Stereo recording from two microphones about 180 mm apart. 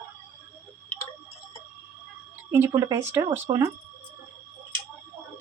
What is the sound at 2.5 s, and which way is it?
Speech, 15° right (ahead or behind).